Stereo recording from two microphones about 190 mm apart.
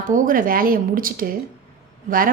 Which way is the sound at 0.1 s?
45° right (ahead or behind).